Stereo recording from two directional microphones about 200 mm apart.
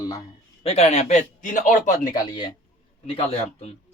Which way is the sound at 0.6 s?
30° left (ahead or behind).